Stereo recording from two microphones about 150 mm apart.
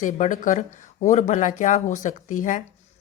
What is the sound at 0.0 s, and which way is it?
Speech, 60° left (ahead or behind).